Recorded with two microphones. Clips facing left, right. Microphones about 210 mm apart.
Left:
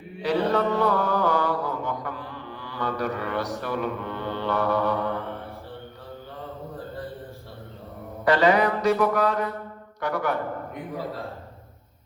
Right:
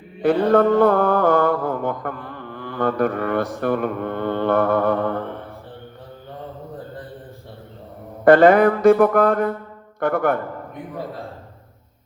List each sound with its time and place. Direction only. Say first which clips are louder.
0.2 s mantra: right 7 dB; 55° right (ahead or behind)
8.2 s mantra: right 8 dB; 55° right (ahead or behind)